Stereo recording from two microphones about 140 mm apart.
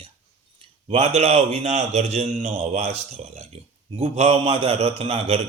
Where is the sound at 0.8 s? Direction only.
50° right (ahead or behind).